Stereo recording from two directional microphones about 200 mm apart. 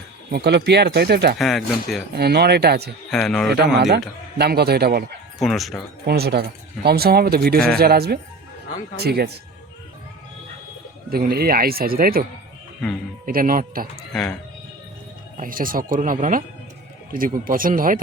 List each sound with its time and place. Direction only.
0.3 s speech: 55° right (ahead or behind)
1.4 s speech: centre (ahead or behind)
2.1 s speech: 55° right (ahead or behind)
3.1 s speech: centre (ahead or behind)
4.4 s speech: 50° right (ahead or behind)
5.4 s speech: centre (ahead or behind)
6.1 s speech: 50° right (ahead or behind)
11.1 s speech: 50° right (ahead or behind)
13.2 s speech: 45° right (ahead or behind)
14.1 s speech: 5° left (ahead or behind)
15.4 s speech: 45° right (ahead or behind)